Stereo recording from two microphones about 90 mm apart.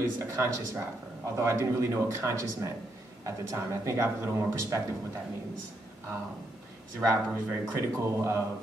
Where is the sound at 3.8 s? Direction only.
30° right (ahead or behind).